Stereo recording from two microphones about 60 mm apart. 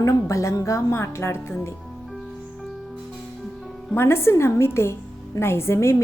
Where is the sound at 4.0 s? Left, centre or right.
Left.